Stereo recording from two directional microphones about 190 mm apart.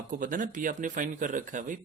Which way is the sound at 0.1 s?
45° right (ahead or behind).